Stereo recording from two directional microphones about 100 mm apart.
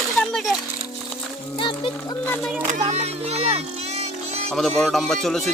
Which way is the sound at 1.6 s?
55° left (ahead or behind).